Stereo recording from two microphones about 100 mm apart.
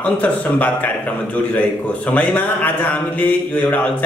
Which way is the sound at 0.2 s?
15° left (ahead or behind).